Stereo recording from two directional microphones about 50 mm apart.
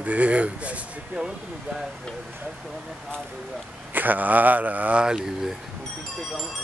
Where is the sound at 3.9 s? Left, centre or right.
Right.